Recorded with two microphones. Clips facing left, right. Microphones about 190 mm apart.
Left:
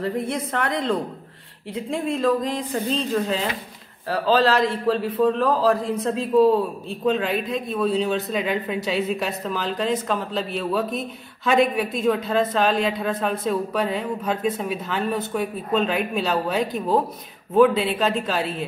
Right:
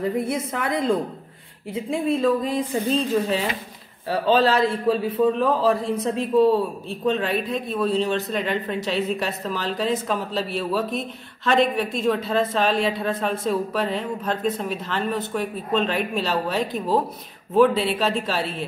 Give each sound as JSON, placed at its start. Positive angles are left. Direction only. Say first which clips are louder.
{"t": 0.0, "sound": "a woman's voice", "louder": "right 1 dB", "side_deg": -5}